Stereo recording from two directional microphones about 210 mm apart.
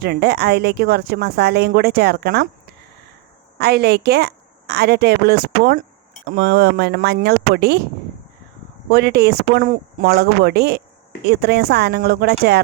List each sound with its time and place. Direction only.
0.0 s a woman's voice: 50° right (ahead or behind)
3.6 s a woman's voice: 50° right (ahead or behind)
8.9 s a woman's voice: 50° right (ahead or behind)